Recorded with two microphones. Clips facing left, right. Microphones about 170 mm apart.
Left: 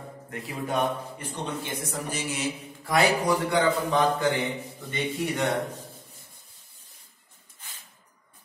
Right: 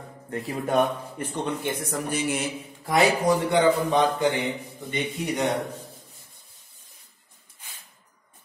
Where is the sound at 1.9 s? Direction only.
55° right (ahead or behind).